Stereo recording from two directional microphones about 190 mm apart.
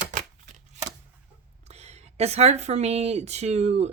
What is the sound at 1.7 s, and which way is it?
Speech, 35° right (ahead or behind).